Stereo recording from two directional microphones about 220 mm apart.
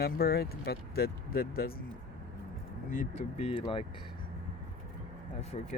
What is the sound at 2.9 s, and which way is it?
Speech, 35° left (ahead or behind).